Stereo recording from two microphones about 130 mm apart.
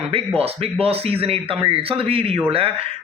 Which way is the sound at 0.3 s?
50° right (ahead or behind).